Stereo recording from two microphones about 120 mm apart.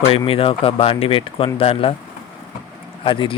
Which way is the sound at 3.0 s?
45° left (ahead or behind).